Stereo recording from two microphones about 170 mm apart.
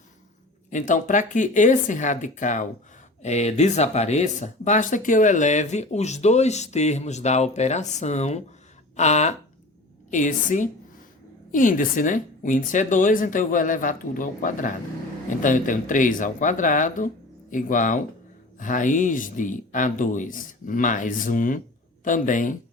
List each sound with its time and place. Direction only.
0.7 s speech: 45° left (ahead or behind)